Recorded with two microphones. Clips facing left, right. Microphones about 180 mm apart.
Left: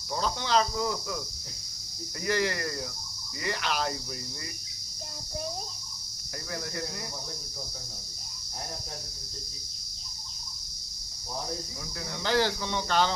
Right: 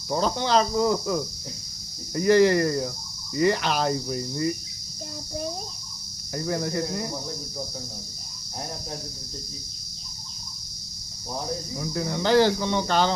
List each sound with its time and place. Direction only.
0.1 s cricket: 35° right (ahead or behind)
6.3 s cricket: 35° right (ahead or behind)
11.9 s cricket: 30° right (ahead or behind)